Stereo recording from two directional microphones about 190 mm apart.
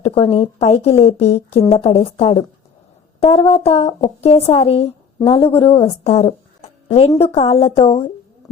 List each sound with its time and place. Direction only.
0.0 s speech: 30° left (ahead or behind)